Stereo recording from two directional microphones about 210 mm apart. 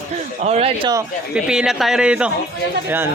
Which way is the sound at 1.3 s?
5° right (ahead or behind).